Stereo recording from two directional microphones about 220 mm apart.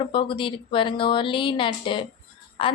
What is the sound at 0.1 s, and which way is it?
A woman's voice, 20° left (ahead or behind).